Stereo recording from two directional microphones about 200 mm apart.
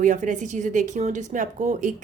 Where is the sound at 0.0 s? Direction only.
40° right (ahead or behind).